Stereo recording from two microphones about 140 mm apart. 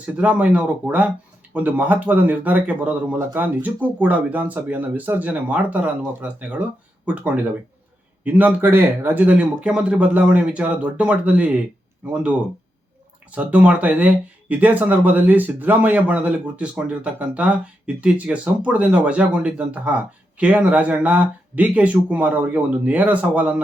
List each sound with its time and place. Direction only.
0.0 s speech: 10° right (ahead or behind)